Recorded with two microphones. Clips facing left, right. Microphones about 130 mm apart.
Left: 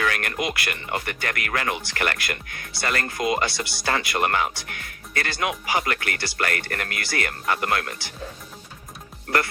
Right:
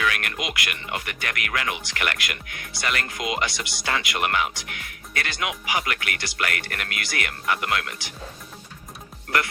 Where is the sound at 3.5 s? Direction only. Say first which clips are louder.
Left 3 dB; 20° right (ahead or behind).